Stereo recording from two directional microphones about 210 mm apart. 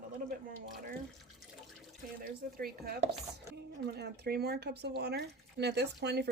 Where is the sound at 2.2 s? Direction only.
45° right (ahead or behind).